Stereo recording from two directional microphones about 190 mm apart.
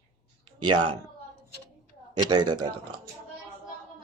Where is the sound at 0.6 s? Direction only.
25° right (ahead or behind).